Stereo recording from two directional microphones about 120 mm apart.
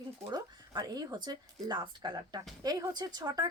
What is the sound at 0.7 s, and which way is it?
A woman's voice, 35° right (ahead or behind).